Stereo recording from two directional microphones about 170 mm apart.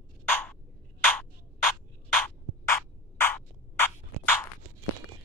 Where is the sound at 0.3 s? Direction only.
10° left (ahead or behind).